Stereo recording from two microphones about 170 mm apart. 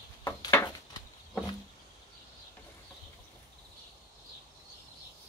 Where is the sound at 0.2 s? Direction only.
15° left (ahead or behind).